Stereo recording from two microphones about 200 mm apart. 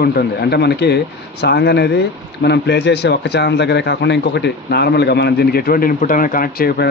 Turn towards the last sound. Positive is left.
turn(degrees=50)  # may be behind; listen again after turning